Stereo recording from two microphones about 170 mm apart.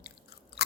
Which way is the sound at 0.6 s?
70° left (ahead or behind).